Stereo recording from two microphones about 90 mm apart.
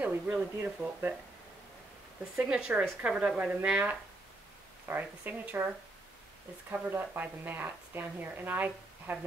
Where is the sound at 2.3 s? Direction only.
10° right (ahead or behind).